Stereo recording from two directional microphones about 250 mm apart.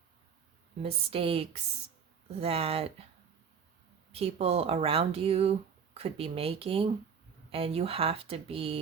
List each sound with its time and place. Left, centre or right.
0.8 s speech: right
4.1 s speech: right